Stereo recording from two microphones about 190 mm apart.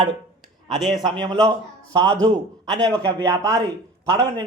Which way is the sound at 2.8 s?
20° right (ahead or behind).